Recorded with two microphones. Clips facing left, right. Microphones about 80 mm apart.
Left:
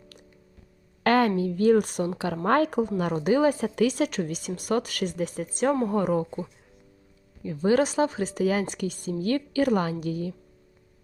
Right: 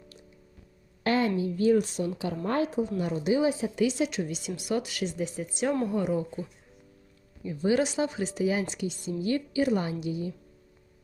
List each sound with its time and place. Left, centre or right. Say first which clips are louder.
1.0 s a sound: left 5 dB; left
1.4 s a woman's voice: left 3 dB; left
3.0 s a woman's voice: left 4 dB; left
7.4 s a woman's voice: left 3 dB; left